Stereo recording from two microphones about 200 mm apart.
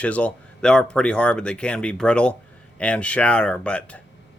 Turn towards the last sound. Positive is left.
turn(degrees=5)  # may be behind; listen again after turning